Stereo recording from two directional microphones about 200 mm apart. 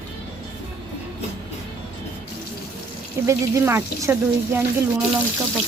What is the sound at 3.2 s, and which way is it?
Speech, 15° right (ahead or behind).